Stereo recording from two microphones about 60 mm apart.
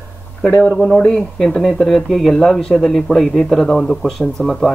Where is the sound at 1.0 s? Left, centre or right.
Centre.